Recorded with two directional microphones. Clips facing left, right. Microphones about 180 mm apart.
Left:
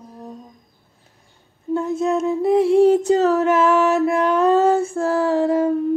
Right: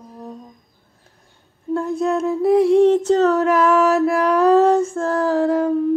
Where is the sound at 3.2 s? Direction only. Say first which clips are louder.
Right 1 dB; centre (ahead or behind).